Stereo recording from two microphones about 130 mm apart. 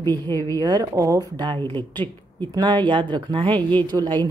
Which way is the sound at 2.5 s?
35° right (ahead or behind).